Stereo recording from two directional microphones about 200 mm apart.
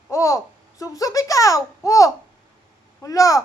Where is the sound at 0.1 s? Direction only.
15° left (ahead or behind).